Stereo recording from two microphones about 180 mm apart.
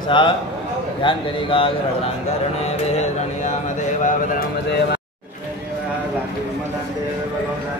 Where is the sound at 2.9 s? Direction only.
40° left (ahead or behind).